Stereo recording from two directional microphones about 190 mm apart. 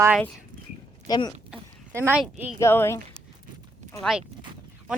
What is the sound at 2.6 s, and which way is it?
Speech, 15° left (ahead or behind).